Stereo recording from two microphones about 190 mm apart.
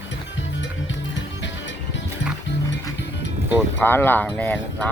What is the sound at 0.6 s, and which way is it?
Music, 75° left (ahead or behind).